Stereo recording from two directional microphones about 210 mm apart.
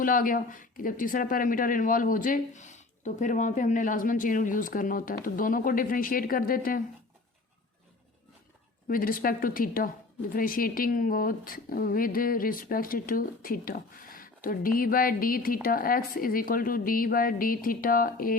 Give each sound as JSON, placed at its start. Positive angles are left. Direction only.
{"t": 0.0, "sound": "speech", "side_deg": 40}
{"t": 8.9, "sound": "a woman's voice", "side_deg": 40}